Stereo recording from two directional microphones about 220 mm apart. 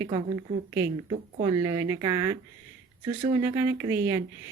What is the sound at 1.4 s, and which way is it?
Speech, 15° right (ahead or behind).